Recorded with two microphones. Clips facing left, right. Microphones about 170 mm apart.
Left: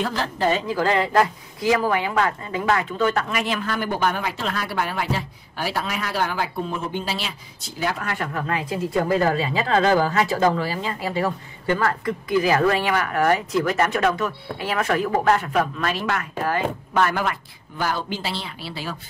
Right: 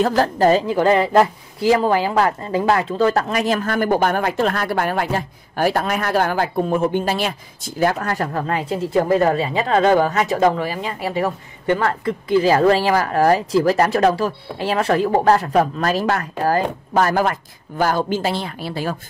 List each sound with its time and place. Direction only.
0.0 s speech: 45° right (ahead or behind)